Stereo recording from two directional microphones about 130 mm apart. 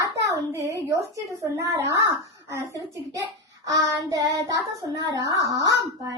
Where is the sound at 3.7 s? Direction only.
25° right (ahead or behind).